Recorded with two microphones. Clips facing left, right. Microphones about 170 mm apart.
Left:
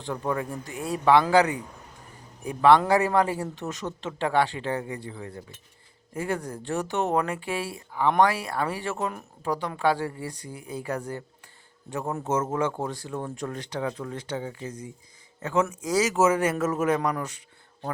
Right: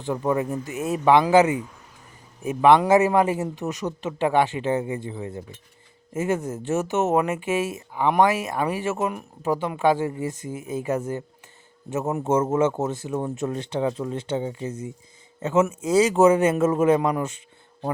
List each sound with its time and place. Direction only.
0.1 s a man's voice: 20° right (ahead or behind)